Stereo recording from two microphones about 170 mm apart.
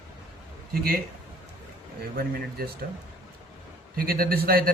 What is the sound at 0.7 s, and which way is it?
Speech, 65° right (ahead or behind).